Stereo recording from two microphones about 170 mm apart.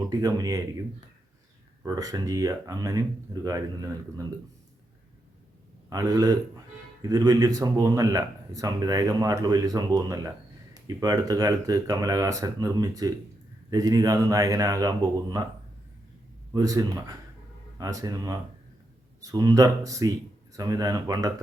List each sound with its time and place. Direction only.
0.1 s speech: 20° right (ahead or behind)
1.8 s speech: 20° right (ahead or behind)
5.9 s speech: 20° right (ahead or behind)
16.5 s speech: 20° right (ahead or behind)